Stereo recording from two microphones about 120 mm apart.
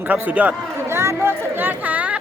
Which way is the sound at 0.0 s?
15° right (ahead or behind).